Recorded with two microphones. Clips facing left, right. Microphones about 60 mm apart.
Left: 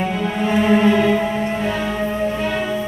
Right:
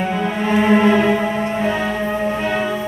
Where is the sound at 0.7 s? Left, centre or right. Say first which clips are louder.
Right 1 dB; right.